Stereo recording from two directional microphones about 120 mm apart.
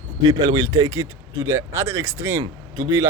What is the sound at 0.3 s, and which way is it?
Speech, 35° right (ahead or behind).